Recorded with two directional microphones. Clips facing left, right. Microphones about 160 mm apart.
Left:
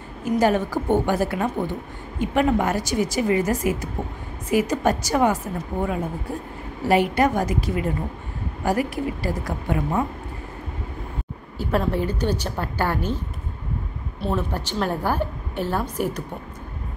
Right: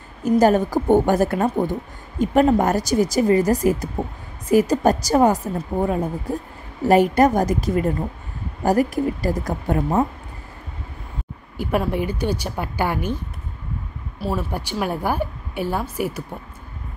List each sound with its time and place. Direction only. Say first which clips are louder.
0.2 s a woman's voice: right 4 dB; 40° right (ahead or behind)
11.5 s a woman's voice: right 1 dB; 15° right (ahead or behind)
14.2 s a woman's voice: even; 10° right (ahead or behind)